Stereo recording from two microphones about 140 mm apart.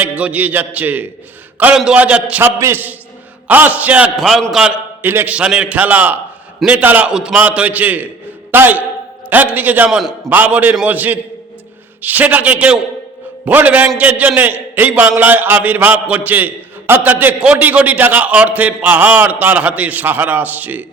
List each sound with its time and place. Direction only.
0.0 s a man's voice: 10° right (ahead or behind)